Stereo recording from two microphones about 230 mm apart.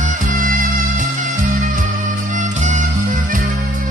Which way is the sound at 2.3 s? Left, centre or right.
Right.